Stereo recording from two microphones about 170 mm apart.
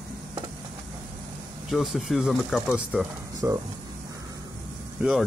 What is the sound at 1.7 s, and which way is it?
Speech, centre (ahead or behind).